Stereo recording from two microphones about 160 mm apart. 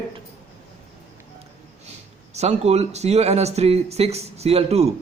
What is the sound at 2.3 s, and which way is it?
Speech, 45° right (ahead or behind).